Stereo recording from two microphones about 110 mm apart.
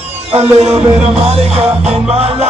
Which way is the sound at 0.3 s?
65° right (ahead or behind).